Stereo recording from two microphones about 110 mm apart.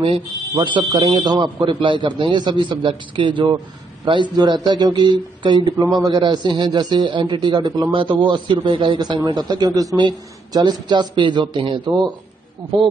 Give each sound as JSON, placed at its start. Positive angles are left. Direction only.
{"t": 0.0, "sound": "a man's voice", "side_deg": -50}
{"t": 9.9, "sound": "speech", "side_deg": -45}